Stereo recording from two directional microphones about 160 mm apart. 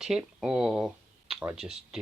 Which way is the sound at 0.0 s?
5° right (ahead or behind).